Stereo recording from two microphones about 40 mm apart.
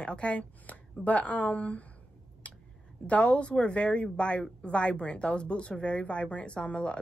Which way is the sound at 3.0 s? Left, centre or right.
Left.